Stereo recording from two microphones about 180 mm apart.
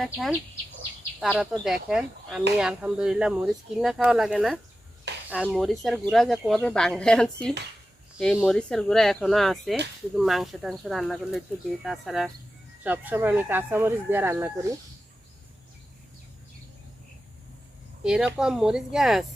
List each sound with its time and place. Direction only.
1.2 s speech: centre (ahead or behind)
18.0 s speech: 5° right (ahead or behind)